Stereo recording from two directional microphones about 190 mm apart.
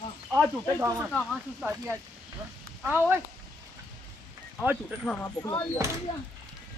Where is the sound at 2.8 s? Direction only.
10° right (ahead or behind).